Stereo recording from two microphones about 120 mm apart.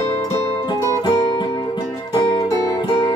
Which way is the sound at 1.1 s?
40° left (ahead or behind).